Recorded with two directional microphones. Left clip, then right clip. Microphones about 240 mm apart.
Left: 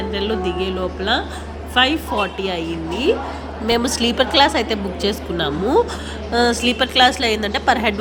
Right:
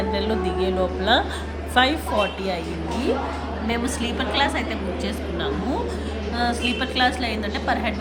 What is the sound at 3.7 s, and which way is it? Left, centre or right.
A woman's voice, centre.